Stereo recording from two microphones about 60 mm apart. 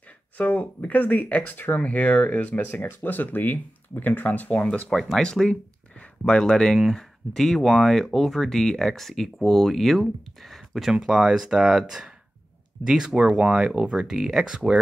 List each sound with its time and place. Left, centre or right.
0.4 s speech: left
4.6 s speech: centre
4.9 s speech: centre